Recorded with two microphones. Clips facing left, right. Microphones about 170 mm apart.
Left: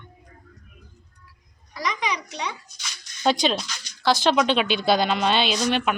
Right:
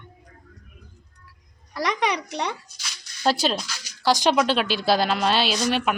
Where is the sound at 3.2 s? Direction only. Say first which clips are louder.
Left 1 dB; 5° right (ahead or behind).